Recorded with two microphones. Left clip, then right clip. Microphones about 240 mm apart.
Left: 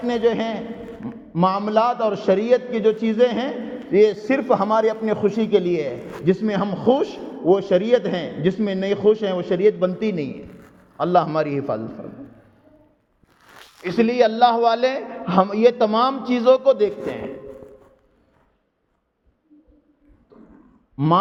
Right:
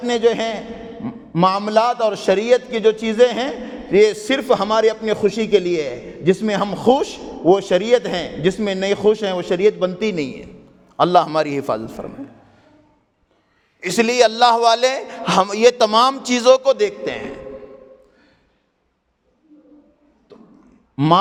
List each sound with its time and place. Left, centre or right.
0.0 s a man's voice: right
13.8 s a man's voice: right
20.9 s speech: right